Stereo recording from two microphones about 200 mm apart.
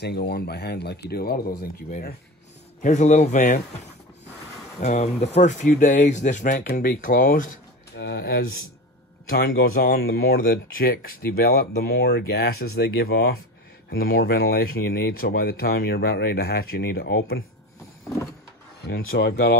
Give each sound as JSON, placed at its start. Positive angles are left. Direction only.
{"t": 0.0, "sound": "speech", "side_deg": 55}
{"t": 4.7, "sound": "speech", "side_deg": 35}
{"t": 7.9, "sound": "speech", "side_deg": 55}
{"t": 18.9, "sound": "speech", "side_deg": 50}